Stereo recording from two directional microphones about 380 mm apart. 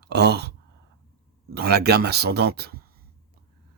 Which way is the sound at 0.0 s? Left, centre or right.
Right.